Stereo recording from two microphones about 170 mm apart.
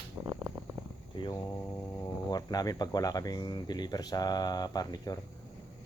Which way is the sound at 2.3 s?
20° left (ahead or behind).